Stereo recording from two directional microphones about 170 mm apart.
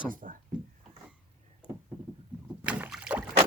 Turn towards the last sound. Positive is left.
turn(degrees=-5)  # may be behind; listen again after turning